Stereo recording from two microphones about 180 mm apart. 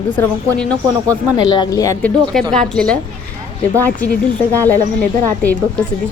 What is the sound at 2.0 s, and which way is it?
Speech, 5° left (ahead or behind).